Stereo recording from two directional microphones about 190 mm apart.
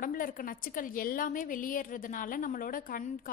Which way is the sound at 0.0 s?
45° left (ahead or behind).